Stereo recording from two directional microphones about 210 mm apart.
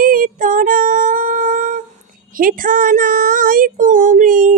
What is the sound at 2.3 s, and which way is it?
A woman's voice, 40° right (ahead or behind).